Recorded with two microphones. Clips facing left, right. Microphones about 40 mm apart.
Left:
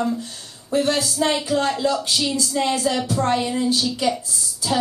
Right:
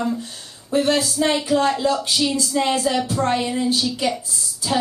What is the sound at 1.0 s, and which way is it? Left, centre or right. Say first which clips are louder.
Speech: right 1 dB; centre.